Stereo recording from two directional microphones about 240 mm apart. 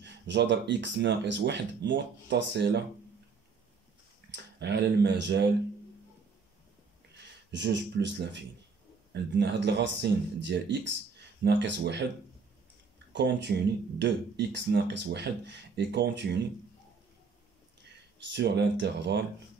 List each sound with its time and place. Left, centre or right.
0.0 s speech: right
4.3 s speech: right
7.5 s speech: right
13.1 s speech: right
18.3 s speech: right